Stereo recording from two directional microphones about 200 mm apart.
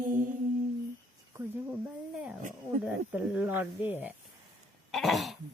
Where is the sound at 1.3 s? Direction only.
15° right (ahead or behind).